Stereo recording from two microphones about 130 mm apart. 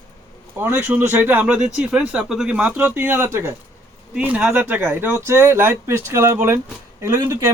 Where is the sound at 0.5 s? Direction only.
15° right (ahead or behind).